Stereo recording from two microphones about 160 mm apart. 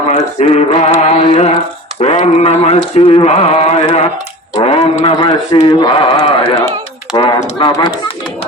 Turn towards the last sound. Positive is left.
turn(degrees=25)  # may be behind; listen again after turning